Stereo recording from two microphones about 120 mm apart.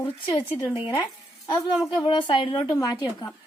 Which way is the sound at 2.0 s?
45° left (ahead or behind).